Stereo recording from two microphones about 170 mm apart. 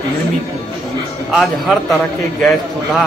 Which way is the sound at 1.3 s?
Centre (ahead or behind).